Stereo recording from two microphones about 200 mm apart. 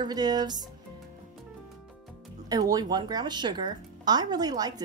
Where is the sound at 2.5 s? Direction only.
20° right (ahead or behind).